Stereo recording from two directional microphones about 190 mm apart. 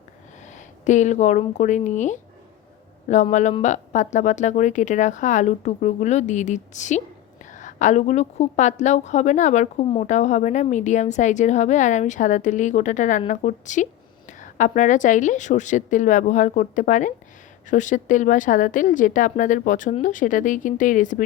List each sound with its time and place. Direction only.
0.4 s a woman's voice: 40° left (ahead or behind)